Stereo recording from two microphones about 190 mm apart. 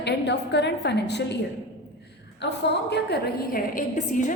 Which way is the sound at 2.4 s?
65° left (ahead or behind).